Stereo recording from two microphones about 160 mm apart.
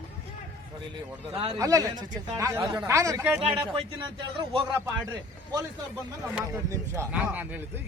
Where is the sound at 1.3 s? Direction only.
35° right (ahead or behind).